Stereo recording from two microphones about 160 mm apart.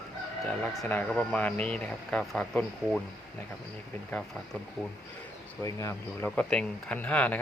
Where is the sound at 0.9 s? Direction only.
10° left (ahead or behind).